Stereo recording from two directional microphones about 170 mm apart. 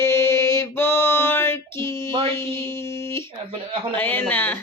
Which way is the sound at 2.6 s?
15° left (ahead or behind).